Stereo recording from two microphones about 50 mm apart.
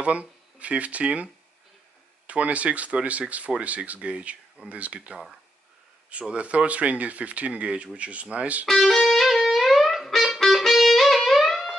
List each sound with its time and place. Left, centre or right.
0.0 s speech: right
6.3 s speech: right
8.6 s music: centre